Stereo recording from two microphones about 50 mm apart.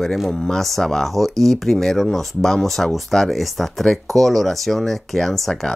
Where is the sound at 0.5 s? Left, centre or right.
Centre.